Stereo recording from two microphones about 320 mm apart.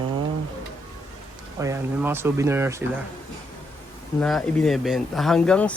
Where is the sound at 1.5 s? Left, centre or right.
Centre.